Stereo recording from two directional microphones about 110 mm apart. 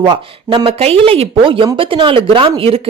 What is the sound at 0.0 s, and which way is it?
Speech, 50° right (ahead or behind).